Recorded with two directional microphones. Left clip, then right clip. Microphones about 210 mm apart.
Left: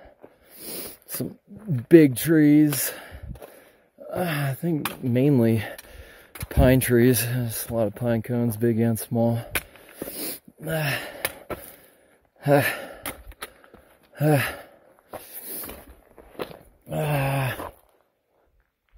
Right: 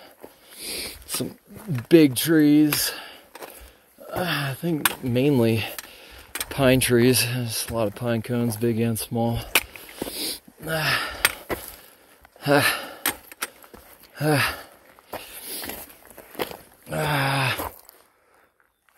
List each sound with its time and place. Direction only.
0.6 s dog: 45° left (ahead or behind)
1.9 s speech: 40° left (ahead or behind)
4.2 s speech: 50° left (ahead or behind)
10.1 s wheeze: 45° left (ahead or behind)
12.4 s gasp: 35° left (ahead or behind)
14.1 s gasp: 40° left (ahead or behind)
15.2 s a sound: 35° left (ahead or behind)
16.9 s dog: 35° left (ahead or behind)